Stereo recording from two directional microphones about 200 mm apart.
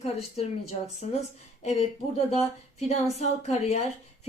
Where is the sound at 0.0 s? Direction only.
30° left (ahead or behind).